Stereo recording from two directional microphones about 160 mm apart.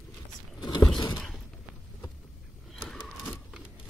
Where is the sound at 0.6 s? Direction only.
25° left (ahead or behind).